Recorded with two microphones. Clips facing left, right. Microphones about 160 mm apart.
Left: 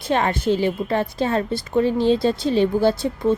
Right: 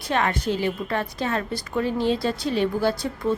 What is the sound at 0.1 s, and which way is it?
A woman's voice, 30° left (ahead or behind).